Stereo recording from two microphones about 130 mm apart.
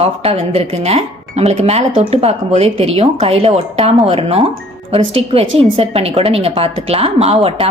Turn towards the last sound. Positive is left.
turn(degrees=-50)  # may be behind; listen again after turning